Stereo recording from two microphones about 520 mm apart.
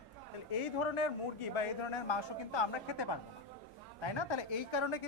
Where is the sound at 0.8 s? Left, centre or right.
Left.